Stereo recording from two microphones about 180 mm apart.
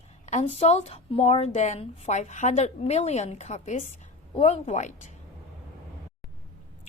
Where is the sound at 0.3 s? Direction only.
35° left (ahead or behind).